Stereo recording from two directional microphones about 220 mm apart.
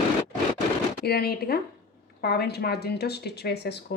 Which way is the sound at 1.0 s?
45° left (ahead or behind).